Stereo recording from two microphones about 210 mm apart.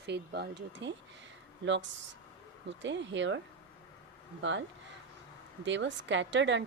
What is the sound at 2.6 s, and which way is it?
A woman's voice, 60° right (ahead or behind).